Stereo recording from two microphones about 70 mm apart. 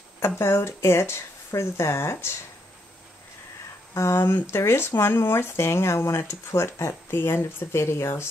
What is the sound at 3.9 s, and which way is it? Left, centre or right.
Speech, left.